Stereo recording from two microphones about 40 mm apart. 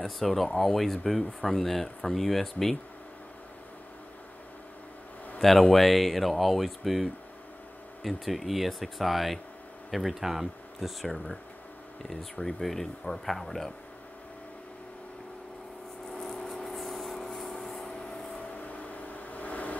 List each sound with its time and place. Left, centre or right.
0.0 s speech: centre
5.4 s speech: centre
12.1 s speech: centre
16.1 s a sound: centre
17.4 s rub: centre
18.4 s vehicle: left